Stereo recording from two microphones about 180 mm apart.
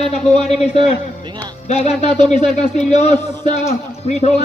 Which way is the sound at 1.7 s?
35° left (ahead or behind).